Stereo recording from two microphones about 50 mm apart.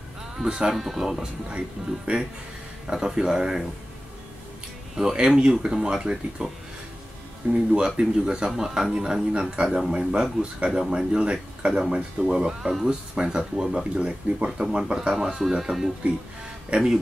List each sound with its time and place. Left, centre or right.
0.4 s speech: centre
2.1 s speech: right
2.9 s speech: centre
4.9 s speech: centre
7.7 s speech: centre
8.9 s speech: centre
16.7 s speech: centre